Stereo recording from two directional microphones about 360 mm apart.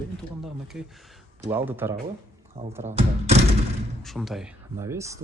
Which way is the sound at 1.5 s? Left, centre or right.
Centre.